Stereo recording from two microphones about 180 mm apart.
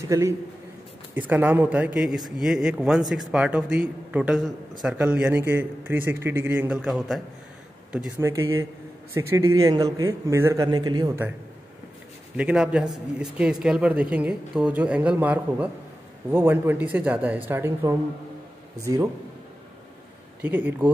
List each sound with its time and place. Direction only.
0.1 s a man's voice: 15° right (ahead or behind)
8.2 s a man's voice: 15° right (ahead or behind)
12.4 s a man's voice: 5° right (ahead or behind)
20.4 s a man's voice: 10° right (ahead or behind)